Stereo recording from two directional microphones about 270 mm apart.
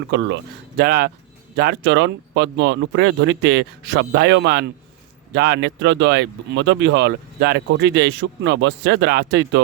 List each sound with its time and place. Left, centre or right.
0.1 s speech: right